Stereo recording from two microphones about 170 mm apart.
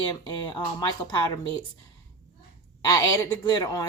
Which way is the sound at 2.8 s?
20° left (ahead or behind).